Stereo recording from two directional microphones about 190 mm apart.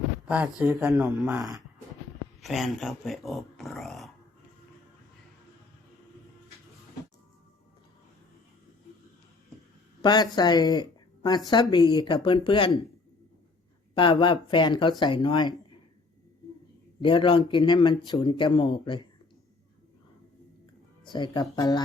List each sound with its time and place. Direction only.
0.3 s speech: 5° right (ahead or behind)
2.4 s speech: centre (ahead or behind)
10.0 s speech: 20° left (ahead or behind)
13.9 s speech: 25° left (ahead or behind)
17.0 s speech: 25° left (ahead or behind)
21.0 s speech: 25° left (ahead or behind)